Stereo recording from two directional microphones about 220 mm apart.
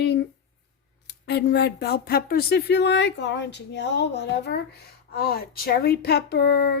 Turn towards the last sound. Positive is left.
turn(degrees=45)  # may be behind; listen again after turning